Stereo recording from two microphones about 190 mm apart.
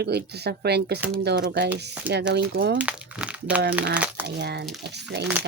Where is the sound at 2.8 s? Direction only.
5° right (ahead or behind).